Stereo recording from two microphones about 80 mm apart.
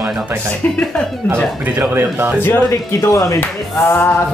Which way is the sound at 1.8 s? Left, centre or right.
Right.